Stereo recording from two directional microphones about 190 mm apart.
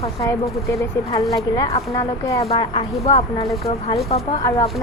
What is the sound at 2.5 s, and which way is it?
A woman's voice, 30° left (ahead or behind).